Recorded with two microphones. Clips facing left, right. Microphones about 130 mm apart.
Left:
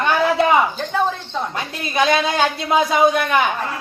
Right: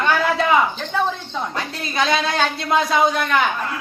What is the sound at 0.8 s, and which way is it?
A woman's voice, 5° left (ahead or behind).